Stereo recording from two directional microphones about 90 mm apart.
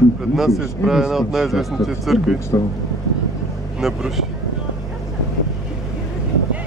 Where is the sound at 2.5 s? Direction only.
40° left (ahead or behind).